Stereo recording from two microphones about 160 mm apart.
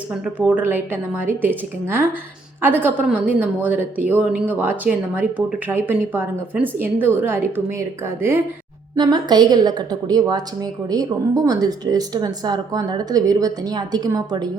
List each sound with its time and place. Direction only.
0.1 s a woman's voice: 10° right (ahead or behind)
9.0 s a woman's voice: 25° right (ahead or behind)